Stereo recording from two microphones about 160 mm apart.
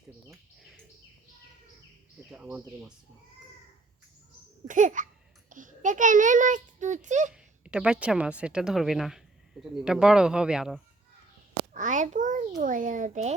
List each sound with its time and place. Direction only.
2.1 s speech: 5° right (ahead or behind)
4.7 s a child's voice: 55° right (ahead or behind)
7.6 s speech: 5° right (ahead or behind)
11.7 s a child's voice: 50° right (ahead or behind)